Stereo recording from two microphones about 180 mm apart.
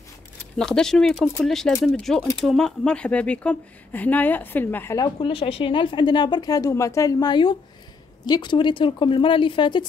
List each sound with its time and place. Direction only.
0.6 s a woman's voice: 5° left (ahead or behind); by 9.8 s 25° left (ahead or behind)